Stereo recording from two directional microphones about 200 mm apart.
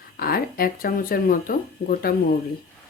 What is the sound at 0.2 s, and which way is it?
Speech, 45° left (ahead or behind).